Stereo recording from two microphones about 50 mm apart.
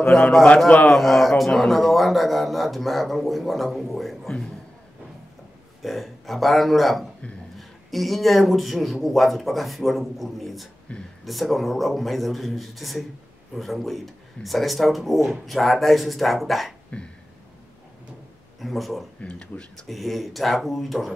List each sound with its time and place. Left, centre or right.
0.8 s speech: centre
5.8 s speech: centre
10.9 s speech: left
11.2 s speech: centre
18.6 s speech: centre
19.2 s speech: left
19.9 s speech: centre